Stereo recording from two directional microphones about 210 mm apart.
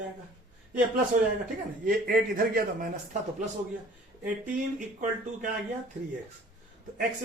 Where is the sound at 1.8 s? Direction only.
40° right (ahead or behind).